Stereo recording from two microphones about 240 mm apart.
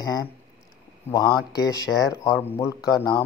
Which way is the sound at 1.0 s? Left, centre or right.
Centre.